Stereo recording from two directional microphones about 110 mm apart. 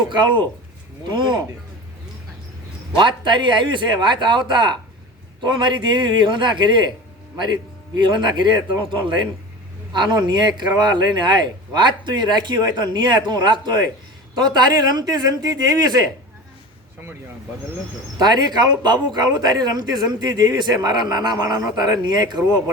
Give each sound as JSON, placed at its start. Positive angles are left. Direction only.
{"t": 0.1, "sound": "speech", "side_deg": -45}
{"t": 3.0, "sound": "speech", "side_deg": -45}
{"t": 18.2, "sound": "speech", "side_deg": -40}